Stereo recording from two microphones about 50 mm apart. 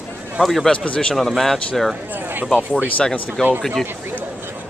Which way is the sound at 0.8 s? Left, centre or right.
Left.